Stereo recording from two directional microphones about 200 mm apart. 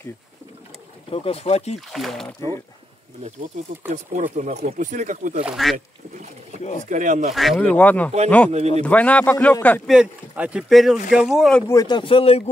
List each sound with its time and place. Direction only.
1.1 s speech: 30° left (ahead or behind)
1.9 s speech: centre (ahead or behind)
3.6 s speech: 35° right (ahead or behind)
5.4 s speech: centre (ahead or behind)
6.9 s speech: 40° right (ahead or behind)
7.3 s speech: centre (ahead or behind)
8.5 s speech: 30° right (ahead or behind)
8.8 s speech: 5° left (ahead or behind)
9.9 s speech: 5° right (ahead or behind)
11.6 s a man's voice: 15° left (ahead or behind)